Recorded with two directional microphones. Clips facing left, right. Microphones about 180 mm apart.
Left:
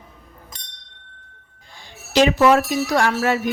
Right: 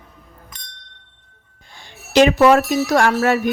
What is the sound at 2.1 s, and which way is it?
Speech, 55° right (ahead or behind).